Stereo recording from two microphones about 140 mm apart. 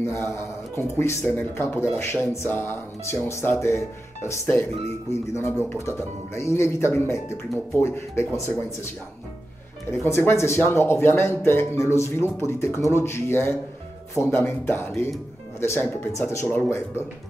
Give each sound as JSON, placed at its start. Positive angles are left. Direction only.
{"t": 0.0, "sound": "speech", "side_deg": 15}
{"t": 5.7, "sound": "speech", "side_deg": 20}
{"t": 9.8, "sound": "speech", "side_deg": 15}